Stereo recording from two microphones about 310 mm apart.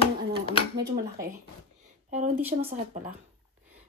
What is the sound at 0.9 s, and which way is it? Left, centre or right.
Speech, right.